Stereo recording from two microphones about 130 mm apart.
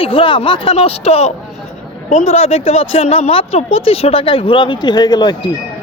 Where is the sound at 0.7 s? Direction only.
55° left (ahead or behind).